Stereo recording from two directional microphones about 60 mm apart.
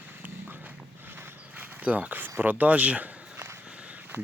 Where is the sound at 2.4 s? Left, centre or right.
Right.